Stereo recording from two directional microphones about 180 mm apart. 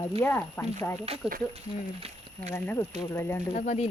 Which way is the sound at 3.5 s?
40° left (ahead or behind).